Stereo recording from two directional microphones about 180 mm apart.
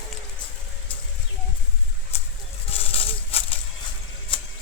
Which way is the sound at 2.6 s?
30° left (ahead or behind).